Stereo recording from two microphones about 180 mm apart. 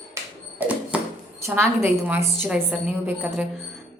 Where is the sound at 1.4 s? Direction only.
15° right (ahead or behind).